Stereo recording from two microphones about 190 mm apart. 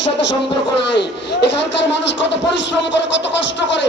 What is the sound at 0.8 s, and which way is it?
Speech, 65° left (ahead or behind).